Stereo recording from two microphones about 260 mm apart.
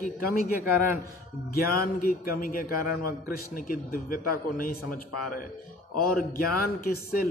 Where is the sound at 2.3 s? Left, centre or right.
Left.